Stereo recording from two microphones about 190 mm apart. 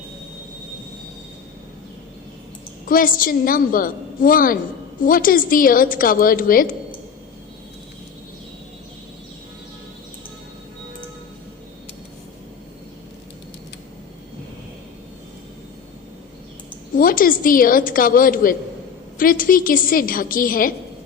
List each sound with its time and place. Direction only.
2.8 s a woman's voice: 45° left (ahead or behind)
16.9 s a woman's voice: 50° left (ahead or behind)